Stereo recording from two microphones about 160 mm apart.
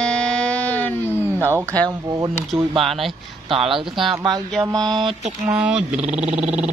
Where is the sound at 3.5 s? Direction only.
35° right (ahead or behind).